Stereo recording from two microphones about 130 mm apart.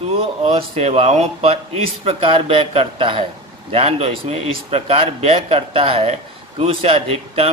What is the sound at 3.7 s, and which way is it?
Speech, 55° right (ahead or behind).